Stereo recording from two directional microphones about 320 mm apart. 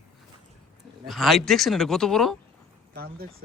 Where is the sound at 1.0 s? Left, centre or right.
Centre.